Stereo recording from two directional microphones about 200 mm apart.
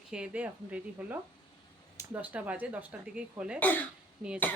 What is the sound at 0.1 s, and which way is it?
Speech, 5° right (ahead or behind).